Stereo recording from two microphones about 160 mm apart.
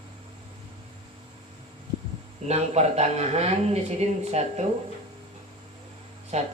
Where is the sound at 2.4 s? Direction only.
45° right (ahead or behind).